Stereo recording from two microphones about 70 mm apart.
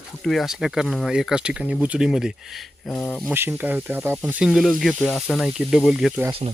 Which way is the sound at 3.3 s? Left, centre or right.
Right.